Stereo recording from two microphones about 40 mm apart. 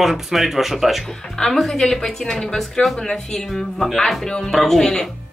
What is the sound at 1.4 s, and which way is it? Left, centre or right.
A woman's voice, left.